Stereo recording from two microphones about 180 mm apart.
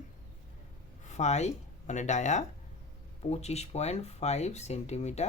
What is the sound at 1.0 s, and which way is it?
Speech, 40° left (ahead or behind).